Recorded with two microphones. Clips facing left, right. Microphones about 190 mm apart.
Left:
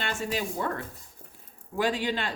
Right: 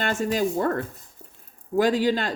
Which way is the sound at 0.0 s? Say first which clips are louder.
Right 7 dB; 45° right (ahead or behind).